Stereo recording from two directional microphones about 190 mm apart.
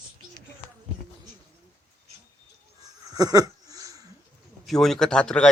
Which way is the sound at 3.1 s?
20° right (ahead or behind).